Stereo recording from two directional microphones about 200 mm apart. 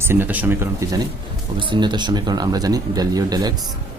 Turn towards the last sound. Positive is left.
turn(degrees=-20)  # may be behind; listen again after turning